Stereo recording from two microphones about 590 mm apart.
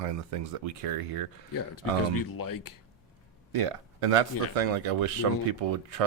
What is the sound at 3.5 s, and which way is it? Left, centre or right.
Speech, right.